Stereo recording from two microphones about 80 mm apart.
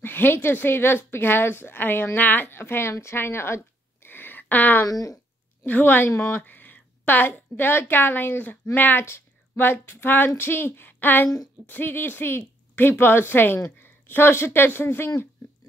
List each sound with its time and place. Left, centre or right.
0.0 s a woman's voice: left
4.8 s a sound: left
5.7 s a woman's voice: left